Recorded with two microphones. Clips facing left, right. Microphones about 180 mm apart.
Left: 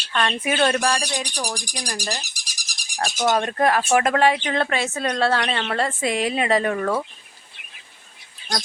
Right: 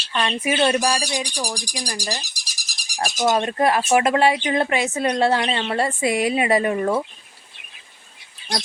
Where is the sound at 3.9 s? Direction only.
15° right (ahead or behind).